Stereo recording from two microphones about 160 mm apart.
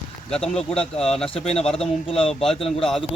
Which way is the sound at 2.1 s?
35° left (ahead or behind).